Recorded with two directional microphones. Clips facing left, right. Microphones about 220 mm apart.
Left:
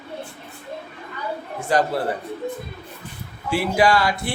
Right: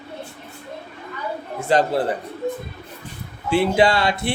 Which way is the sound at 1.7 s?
25° right (ahead or behind).